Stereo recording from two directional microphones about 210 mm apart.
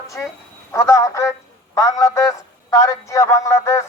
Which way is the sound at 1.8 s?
15° left (ahead or behind).